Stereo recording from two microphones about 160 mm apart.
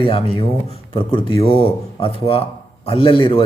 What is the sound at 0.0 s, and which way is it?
A man's voice, 35° left (ahead or behind).